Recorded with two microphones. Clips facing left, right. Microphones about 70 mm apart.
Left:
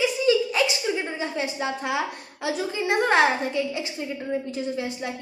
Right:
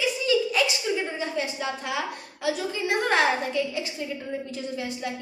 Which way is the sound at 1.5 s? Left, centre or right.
Centre.